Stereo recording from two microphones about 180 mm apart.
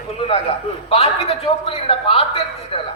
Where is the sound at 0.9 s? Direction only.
30° left (ahead or behind).